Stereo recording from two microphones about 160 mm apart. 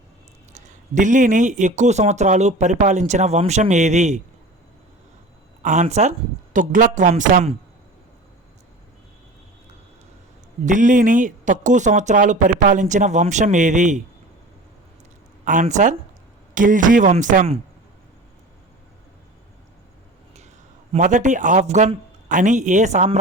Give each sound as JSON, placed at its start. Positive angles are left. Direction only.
{"t": 0.5, "sound": "a man's voice", "side_deg": -50}
{"t": 5.6, "sound": "a man's voice", "side_deg": -50}
{"t": 10.7, "sound": "a man's voice", "side_deg": -55}
{"t": 15.6, "sound": "a man's voice", "side_deg": -50}
{"t": 20.9, "sound": "a man's voice", "side_deg": -50}